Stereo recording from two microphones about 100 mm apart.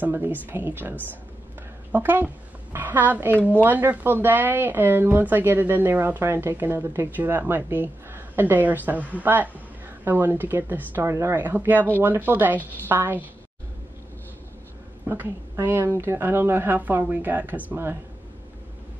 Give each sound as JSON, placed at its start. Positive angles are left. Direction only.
{"t": 0.0, "sound": "a woman's voice", "side_deg": -20}
{"t": 15.0, "sound": "speech", "side_deg": -20}